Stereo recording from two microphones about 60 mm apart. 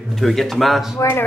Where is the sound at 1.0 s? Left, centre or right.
Left.